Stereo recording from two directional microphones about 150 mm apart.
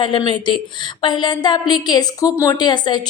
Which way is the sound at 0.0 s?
30° left (ahead or behind).